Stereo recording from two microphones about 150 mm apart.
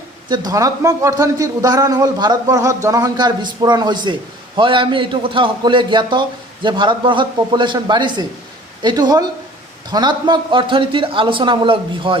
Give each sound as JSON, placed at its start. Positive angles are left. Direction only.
{"t": 0.3, "sound": "a man's voice", "side_deg": -25}